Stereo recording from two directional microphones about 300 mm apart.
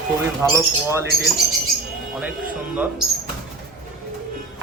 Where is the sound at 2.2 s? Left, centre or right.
Centre.